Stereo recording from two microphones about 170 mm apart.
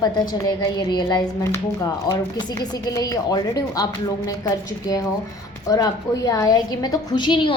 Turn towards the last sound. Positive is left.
turn(degrees=30)  # may be behind; listen again after turning